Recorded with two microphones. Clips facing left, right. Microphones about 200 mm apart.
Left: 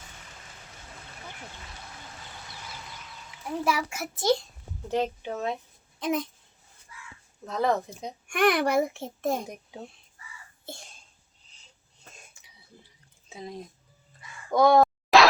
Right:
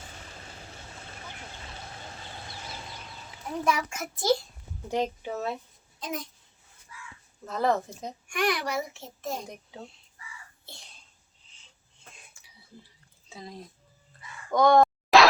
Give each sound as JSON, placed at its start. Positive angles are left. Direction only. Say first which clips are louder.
{"t": 0.0, "sound": "vehicle", "louder": "right 4 dB", "side_deg": -35}
{"t": 1.6, "sound": "a sound", "louder": "right 3 dB", "side_deg": -30}
{"t": 3.6, "sound": "a child's voice", "louder": "even", "side_deg": 5}
{"t": 4.9, "sound": "speech", "louder": "left 1 dB", "side_deg": -10}
{"t": 6.0, "sound": "speech", "louder": "left 8 dB", "side_deg": 60}
{"t": 7.4, "sound": "speech", "louder": "even", "side_deg": 0}
{"t": 8.3, "sound": "a child's voice", "louder": "left 6 dB", "side_deg": 55}
{"t": 9.5, "sound": "a child's voice", "louder": "left 2 dB", "side_deg": 15}
{"t": 10.7, "sound": "a child's voice", "louder": "left 11 dB", "side_deg": 50}
{"t": 14.5, "sound": "a sound", "louder": "left 1 dB", "side_deg": 5}